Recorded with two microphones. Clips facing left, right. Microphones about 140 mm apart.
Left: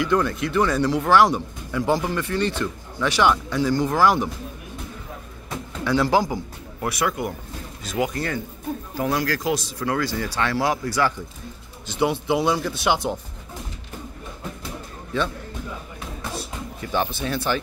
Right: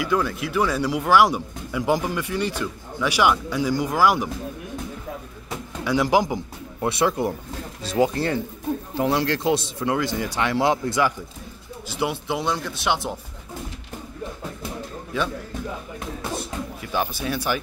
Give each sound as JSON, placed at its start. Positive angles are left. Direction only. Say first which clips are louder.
{"t": 0.0, "sound": "speech", "louder": "left 2 dB", "side_deg": -5}
{"t": 5.9, "sound": "speech", "louder": "even", "side_deg": -15}
{"t": 11.9, "sound": "speech", "louder": "left 4 dB", "side_deg": 0}
{"t": 15.1, "sound": "speech", "louder": "left 1 dB", "side_deg": -10}
{"t": 16.8, "sound": "speech", "louder": "left 2 dB", "side_deg": -5}